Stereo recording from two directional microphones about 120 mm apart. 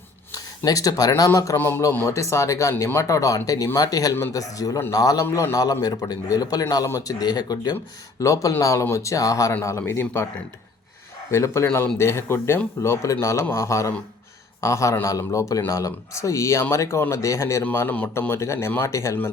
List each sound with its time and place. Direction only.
0.3 s a man's voice: 30° left (ahead or behind)
11.3 s speech: 25° left (ahead or behind)